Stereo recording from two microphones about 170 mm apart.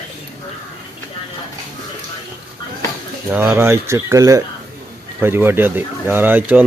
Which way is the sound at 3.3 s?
10° right (ahead or behind).